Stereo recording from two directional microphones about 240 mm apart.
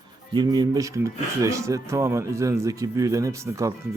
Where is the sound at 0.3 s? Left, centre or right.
Centre.